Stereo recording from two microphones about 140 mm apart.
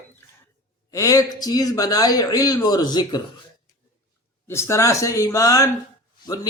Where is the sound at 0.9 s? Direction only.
25° left (ahead or behind).